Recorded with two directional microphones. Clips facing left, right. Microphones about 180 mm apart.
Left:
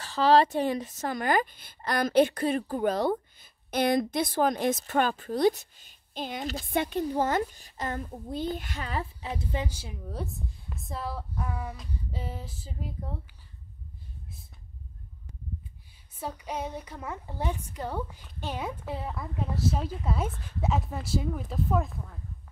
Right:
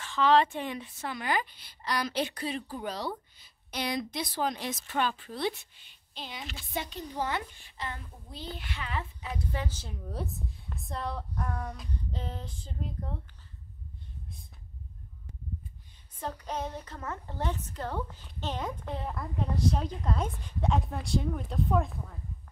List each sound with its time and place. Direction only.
0.0 s speech: 35° left (ahead or behind)
9.3 s a woman's voice: 20° left (ahead or behind); by 13.2 s 5° left (ahead or behind)
16.2 s a woman's voice: 10° left (ahead or behind)